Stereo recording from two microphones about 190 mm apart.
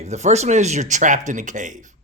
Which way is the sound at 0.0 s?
35° right (ahead or behind).